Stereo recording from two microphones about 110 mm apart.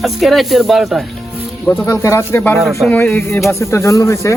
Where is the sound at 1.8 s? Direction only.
25° left (ahead or behind).